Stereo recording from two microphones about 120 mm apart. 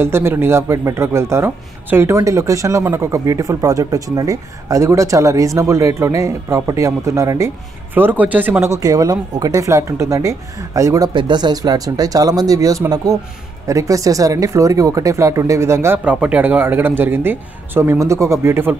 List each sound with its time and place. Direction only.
0.0 s speech: 20° right (ahead or behind)
16.0 s speech: 10° right (ahead or behind)